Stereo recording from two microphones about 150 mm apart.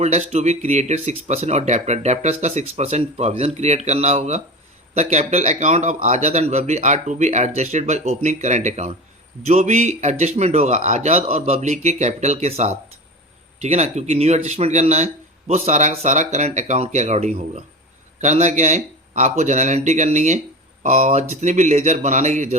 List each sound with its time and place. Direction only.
0.0 s speech: 50° right (ahead or behind)